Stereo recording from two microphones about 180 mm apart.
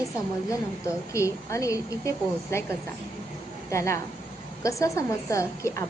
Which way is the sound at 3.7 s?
15° left (ahead or behind).